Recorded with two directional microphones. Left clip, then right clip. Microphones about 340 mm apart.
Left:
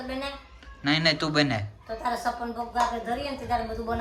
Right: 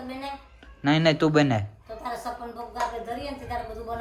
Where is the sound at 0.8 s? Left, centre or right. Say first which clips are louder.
Right 3 dB; centre.